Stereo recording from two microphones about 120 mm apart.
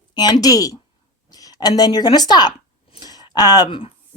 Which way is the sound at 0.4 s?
30° left (ahead or behind).